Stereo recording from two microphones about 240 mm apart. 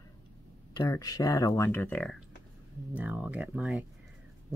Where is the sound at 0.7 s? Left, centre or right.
Centre.